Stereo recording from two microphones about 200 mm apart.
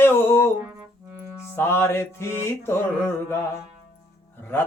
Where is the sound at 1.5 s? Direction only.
10° left (ahead or behind).